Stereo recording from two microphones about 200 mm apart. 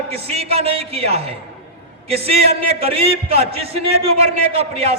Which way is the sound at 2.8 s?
30° right (ahead or behind).